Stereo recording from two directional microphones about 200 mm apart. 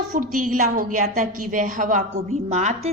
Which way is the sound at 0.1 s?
40° right (ahead or behind).